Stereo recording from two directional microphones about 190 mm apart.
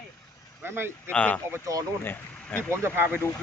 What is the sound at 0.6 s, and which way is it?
Speech, 10° right (ahead or behind).